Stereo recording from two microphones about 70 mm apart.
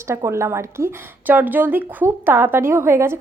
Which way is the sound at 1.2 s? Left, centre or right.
Right.